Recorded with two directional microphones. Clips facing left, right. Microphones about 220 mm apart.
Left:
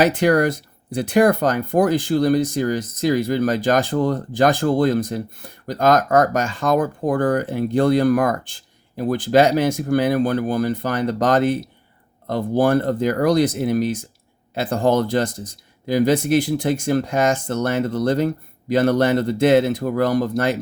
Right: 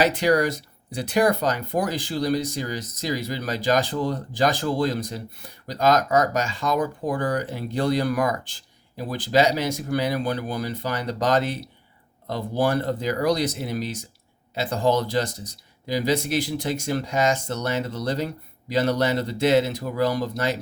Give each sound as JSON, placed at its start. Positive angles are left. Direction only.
{"t": 0.0, "sound": "speech", "side_deg": 50}